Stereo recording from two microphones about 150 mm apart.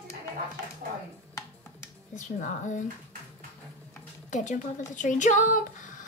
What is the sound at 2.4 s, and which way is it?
Speech, 55° left (ahead or behind).